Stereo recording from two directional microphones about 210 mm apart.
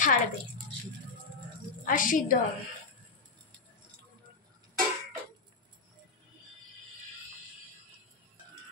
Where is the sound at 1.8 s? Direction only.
40° left (ahead or behind).